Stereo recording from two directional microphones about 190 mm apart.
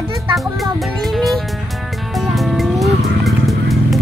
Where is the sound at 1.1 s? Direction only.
Centre (ahead or behind).